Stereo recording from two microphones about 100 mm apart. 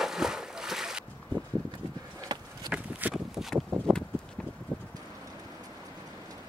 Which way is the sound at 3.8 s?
5° left (ahead or behind).